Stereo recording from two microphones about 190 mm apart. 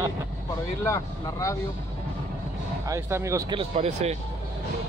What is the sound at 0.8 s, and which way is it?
Speech, 15° left (ahead or behind).